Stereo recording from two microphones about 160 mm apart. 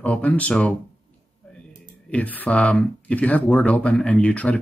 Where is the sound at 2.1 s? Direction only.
10° left (ahead or behind).